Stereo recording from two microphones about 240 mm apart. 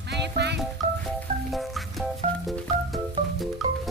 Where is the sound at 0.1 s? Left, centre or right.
Right.